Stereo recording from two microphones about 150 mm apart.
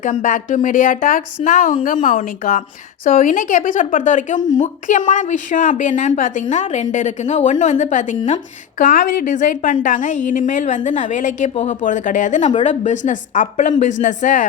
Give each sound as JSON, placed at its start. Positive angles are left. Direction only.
{"t": 0.0, "sound": "speech", "side_deg": 55}